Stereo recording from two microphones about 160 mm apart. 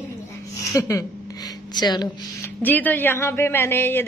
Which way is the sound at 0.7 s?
20° left (ahead or behind).